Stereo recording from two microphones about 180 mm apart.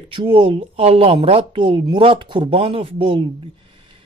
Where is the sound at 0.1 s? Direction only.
30° right (ahead or behind).